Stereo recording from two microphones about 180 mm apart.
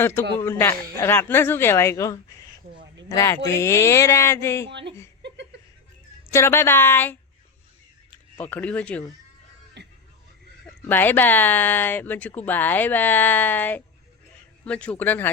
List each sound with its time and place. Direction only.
0.0 s speech: 10° left (ahead or behind)
6.3 s speech: 15° left (ahead or behind)
8.4 s speech: 10° left (ahead or behind)
9.8 s music: 70° right (ahead or behind)
10.7 s speech: 10° left (ahead or behind)